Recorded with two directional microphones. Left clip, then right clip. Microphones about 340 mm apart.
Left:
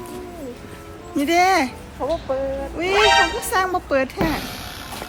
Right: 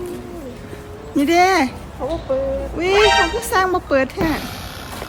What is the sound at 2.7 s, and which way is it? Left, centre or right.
A woman's voice, centre.